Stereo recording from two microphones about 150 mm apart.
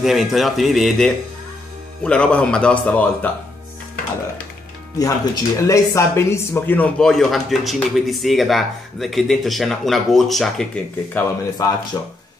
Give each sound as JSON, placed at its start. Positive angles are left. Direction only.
{"t": 0.0, "sound": "a man's voice", "side_deg": 0}
{"t": 4.9, "sound": "speech", "side_deg": 25}
{"t": 11.2, "sound": "speech", "side_deg": 25}